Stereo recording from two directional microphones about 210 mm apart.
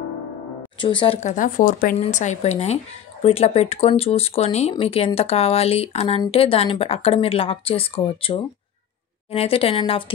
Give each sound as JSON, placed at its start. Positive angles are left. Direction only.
{"t": 0.7, "sound": "speech", "side_deg": 25}
{"t": 1.3, "sound": "speech", "side_deg": 40}